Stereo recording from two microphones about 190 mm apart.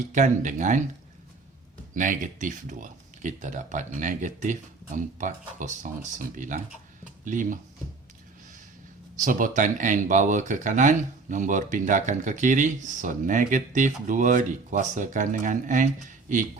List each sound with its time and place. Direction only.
0.1 s speech: 40° right (ahead or behind)
2.0 s speech: 40° right (ahead or behind)
9.1 s speech: 45° right (ahead or behind)